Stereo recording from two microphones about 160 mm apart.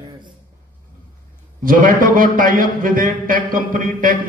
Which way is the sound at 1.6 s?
60° right (ahead or behind).